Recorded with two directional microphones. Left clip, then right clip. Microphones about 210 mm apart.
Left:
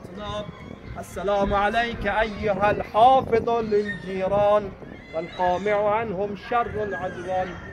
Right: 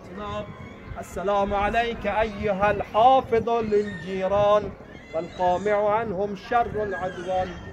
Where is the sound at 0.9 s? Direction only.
5° left (ahead or behind).